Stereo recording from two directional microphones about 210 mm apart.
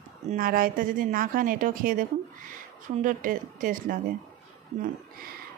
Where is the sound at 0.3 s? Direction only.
45° right (ahead or behind).